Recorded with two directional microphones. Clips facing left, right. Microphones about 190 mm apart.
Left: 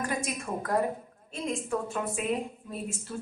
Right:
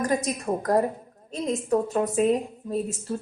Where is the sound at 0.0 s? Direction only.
40° right (ahead or behind).